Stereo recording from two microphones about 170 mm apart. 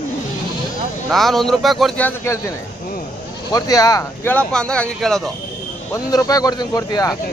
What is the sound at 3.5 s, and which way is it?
Speech, 20° left (ahead or behind).